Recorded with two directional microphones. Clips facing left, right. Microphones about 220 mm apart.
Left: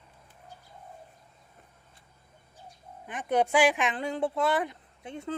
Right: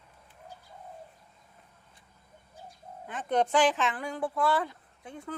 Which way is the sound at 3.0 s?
15° left (ahead or behind).